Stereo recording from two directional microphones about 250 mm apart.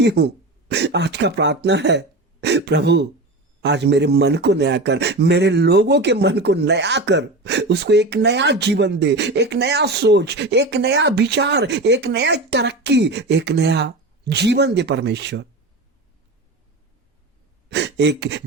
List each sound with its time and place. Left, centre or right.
0.0 s speech: right
17.7 s speech: right